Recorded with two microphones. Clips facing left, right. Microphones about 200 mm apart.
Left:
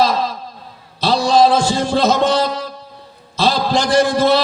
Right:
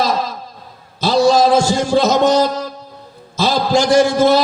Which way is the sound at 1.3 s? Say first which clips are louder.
Left 2 dB; 45° right (ahead or behind).